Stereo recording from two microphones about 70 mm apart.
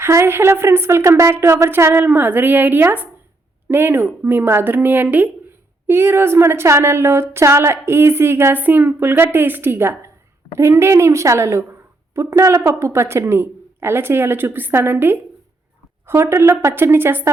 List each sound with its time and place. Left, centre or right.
0.0 s a woman's voice: right
16.3 s a woman's voice: right